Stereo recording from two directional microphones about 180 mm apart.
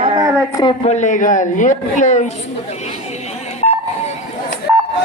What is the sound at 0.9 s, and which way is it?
A man's voice, 40° left (ahead or behind).